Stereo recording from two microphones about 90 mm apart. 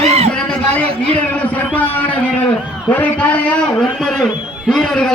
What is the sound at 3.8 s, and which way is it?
A man's voice, 5° left (ahead or behind).